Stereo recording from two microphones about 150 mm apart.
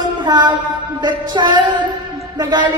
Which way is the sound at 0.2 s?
30° right (ahead or behind).